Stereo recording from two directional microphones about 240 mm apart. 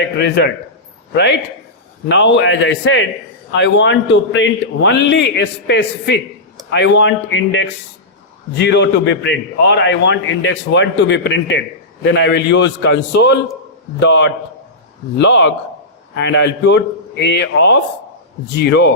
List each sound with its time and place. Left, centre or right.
0.2 s a man's voice: left